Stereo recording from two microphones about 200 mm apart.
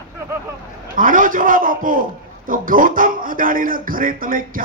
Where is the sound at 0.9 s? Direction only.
45° right (ahead or behind).